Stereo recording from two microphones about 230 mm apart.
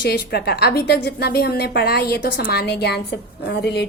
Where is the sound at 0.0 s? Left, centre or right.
Left.